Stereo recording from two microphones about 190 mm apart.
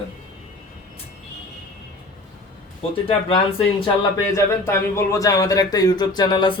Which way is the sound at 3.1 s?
30° left (ahead or behind).